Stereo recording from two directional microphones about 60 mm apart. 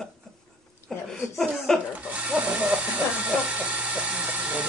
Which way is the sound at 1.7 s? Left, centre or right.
Centre.